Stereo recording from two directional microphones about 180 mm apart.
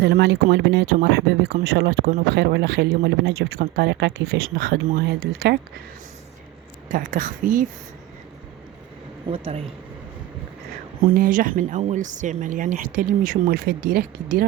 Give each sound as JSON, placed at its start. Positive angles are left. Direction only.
{"t": 0.0, "sound": "speech", "side_deg": -65}
{"t": 6.8, "sound": "speech", "side_deg": -50}
{"t": 9.3, "sound": "speech", "side_deg": -35}
{"t": 11.1, "sound": "speech", "side_deg": -50}